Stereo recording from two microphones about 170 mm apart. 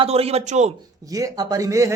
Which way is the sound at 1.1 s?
20° right (ahead or behind).